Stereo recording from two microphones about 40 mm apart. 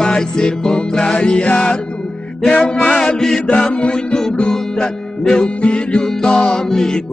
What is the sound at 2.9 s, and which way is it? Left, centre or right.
Mantra, centre.